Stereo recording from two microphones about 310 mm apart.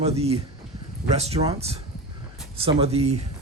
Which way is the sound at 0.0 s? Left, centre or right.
Centre.